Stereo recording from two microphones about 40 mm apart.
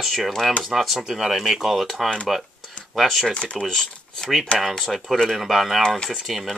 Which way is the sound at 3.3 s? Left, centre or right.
Left.